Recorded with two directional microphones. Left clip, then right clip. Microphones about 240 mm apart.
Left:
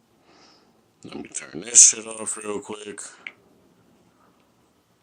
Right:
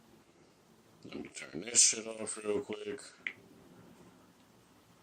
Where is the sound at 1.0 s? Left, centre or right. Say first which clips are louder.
Left 9 dB; left.